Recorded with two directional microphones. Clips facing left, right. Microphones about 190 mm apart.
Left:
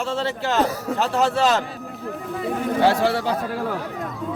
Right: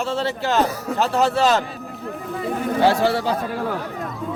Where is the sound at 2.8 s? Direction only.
35° right (ahead or behind).